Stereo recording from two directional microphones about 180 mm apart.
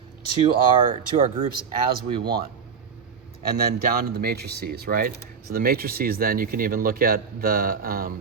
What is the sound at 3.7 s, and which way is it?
Speech, 60° right (ahead or behind).